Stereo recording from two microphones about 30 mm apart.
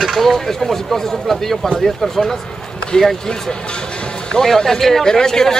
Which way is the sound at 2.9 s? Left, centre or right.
Left.